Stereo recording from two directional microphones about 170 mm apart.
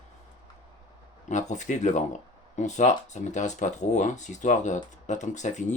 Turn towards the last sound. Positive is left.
turn(degrees=45)  # may be behind; listen again after turning